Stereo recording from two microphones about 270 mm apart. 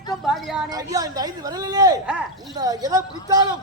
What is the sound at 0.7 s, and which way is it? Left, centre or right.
A man's voice, centre.